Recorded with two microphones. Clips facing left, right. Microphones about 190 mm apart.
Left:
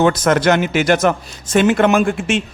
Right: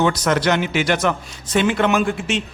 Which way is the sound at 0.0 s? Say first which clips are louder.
Left 4 dB; 50° left (ahead or behind).